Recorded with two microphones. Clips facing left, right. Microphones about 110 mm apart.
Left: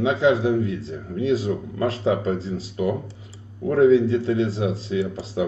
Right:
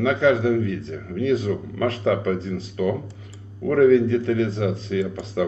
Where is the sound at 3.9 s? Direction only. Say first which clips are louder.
Even; 30° left (ahead or behind).